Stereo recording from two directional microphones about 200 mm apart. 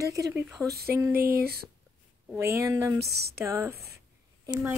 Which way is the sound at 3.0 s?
55° right (ahead or behind).